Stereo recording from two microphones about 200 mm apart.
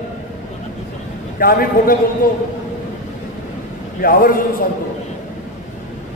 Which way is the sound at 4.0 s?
45° left (ahead or behind).